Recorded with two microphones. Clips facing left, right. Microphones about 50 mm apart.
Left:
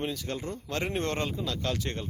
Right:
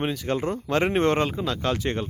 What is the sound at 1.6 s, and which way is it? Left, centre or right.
Speech, right.